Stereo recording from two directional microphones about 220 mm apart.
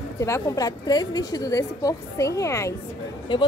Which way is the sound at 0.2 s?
15° left (ahead or behind).